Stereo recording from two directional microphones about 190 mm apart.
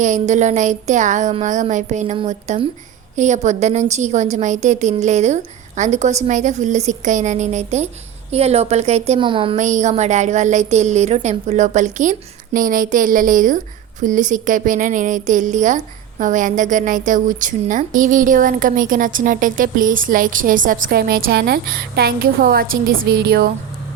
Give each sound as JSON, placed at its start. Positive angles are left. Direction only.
{"t": 0.0, "sound": "a woman's voice", "side_deg": -40}